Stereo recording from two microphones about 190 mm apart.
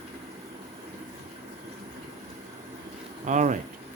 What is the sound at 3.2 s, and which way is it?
Speech, 40° right (ahead or behind).